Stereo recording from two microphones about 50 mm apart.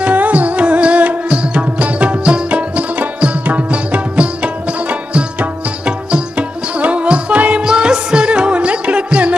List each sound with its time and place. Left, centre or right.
0.0 s music: right